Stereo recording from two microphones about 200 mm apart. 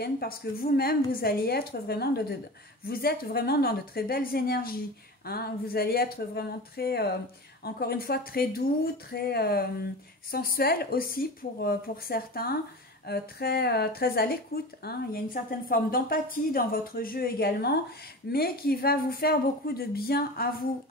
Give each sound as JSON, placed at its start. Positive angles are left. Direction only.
{"t": 0.0, "sound": "a woman's voice", "side_deg": 50}